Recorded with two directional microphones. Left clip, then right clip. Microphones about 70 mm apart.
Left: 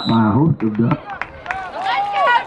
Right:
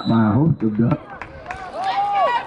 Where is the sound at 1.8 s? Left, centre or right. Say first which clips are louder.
Left 2 dB; left.